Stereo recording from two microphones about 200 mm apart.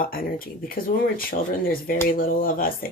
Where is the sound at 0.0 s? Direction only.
45° left (ahead or behind).